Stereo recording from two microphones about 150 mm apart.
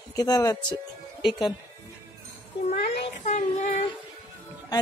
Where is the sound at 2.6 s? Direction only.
50° left (ahead or behind).